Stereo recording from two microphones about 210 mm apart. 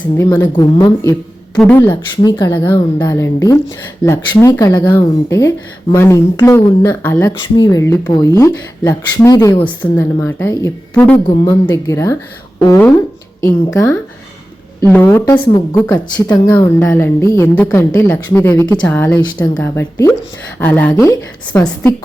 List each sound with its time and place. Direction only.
0.2 s speech: 10° left (ahead or behind)
1.5 s speech: 5° left (ahead or behind)
14.8 s speech: 10° left (ahead or behind)